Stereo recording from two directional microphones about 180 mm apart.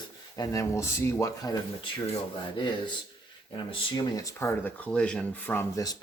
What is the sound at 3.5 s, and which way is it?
Speech, 25° left (ahead or behind).